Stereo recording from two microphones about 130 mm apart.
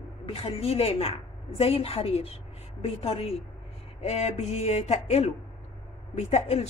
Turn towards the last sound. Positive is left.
turn(degrees=55)  # may be behind; listen again after turning